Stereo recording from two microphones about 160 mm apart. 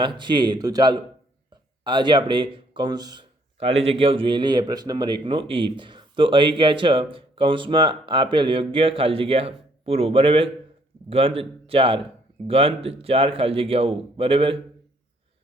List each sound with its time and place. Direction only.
0.0 s speech: 30° right (ahead or behind)
3.6 s speech: 40° right (ahead or behind)